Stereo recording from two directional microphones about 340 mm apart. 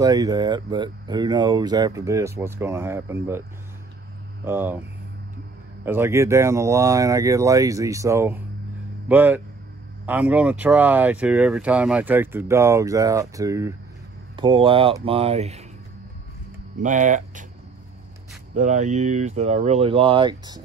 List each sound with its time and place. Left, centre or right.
0.0 s speech: centre
4.5 s speech: centre
5.9 s speech: centre
16.7 s speech: right
18.5 s speech: right